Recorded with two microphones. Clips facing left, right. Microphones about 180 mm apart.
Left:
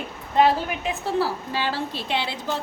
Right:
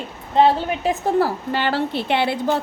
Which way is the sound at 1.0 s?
55° right (ahead or behind).